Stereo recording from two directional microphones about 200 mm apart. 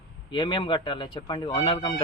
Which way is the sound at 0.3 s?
25° left (ahead or behind).